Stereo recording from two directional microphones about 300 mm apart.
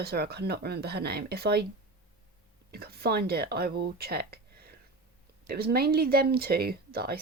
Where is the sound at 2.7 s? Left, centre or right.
Right.